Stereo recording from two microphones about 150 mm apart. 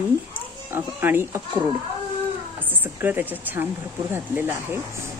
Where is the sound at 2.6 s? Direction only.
10° right (ahead or behind).